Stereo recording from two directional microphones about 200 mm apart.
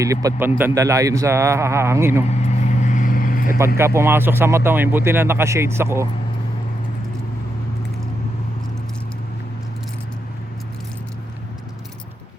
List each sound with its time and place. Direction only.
0.0 s speech: 15° right (ahead or behind)
2.3 s vehicle: 35° left (ahead or behind)
3.8 s speech: 15° right (ahead or behind)